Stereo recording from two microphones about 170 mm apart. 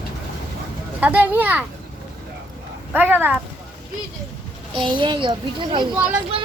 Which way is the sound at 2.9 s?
10° right (ahead or behind).